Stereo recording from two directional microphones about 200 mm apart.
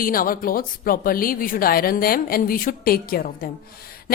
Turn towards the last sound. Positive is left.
turn(degrees=45)  # may be behind; listen again after turning